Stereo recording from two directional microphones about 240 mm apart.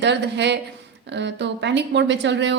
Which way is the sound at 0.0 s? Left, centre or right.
Right.